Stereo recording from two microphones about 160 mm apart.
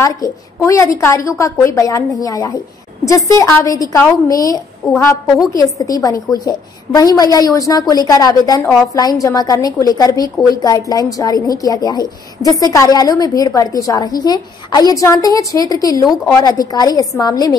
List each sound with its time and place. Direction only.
0.0 s a woman's voice: 20° left (ahead or behind)